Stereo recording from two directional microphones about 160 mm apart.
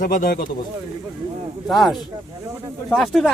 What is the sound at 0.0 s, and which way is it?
Speech, 60° left (ahead or behind).